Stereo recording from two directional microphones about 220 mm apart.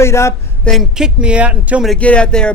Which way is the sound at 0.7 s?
Centre (ahead or behind).